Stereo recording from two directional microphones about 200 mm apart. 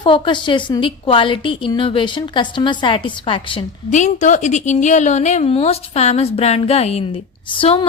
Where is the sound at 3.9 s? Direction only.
35° left (ahead or behind).